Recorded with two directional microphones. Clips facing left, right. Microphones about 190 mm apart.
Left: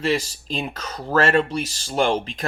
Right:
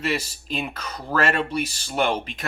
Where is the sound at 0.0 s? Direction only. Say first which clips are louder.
Left 4 dB; 30° left (ahead or behind).